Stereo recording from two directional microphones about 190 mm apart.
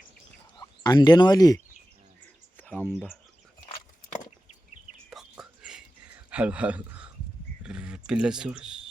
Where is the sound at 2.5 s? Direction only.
10° left (ahead or behind).